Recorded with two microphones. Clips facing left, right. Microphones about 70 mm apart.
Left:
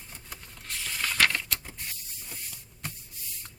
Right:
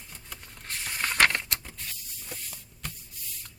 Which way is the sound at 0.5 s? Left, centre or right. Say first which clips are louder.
Right 1 dB; right.